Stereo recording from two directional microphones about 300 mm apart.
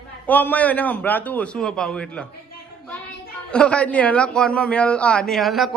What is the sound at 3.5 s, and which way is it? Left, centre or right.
A man's voice, centre.